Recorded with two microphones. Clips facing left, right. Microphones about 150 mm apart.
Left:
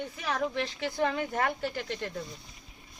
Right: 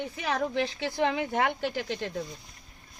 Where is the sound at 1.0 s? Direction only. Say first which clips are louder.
Right 2 dB; 80° right.